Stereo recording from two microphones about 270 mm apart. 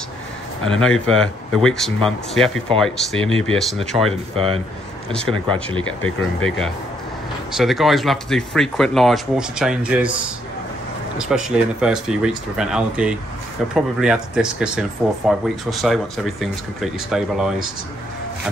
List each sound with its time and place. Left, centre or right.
0.7 s speech: centre
5.5 s speech: centre
6.0 s speech: centre
11.1 s speech: centre